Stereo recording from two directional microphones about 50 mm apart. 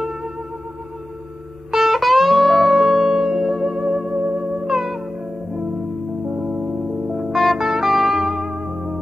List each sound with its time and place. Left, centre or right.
1.7 s music: centre
4.1 s music: right
4.4 s music: centre
6.5 s music: centre